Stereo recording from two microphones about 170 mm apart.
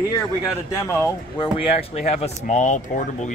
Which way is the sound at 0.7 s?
20° left (ahead or behind).